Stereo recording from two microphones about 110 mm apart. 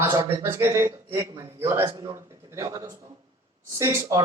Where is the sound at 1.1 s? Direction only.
30° right (ahead or behind).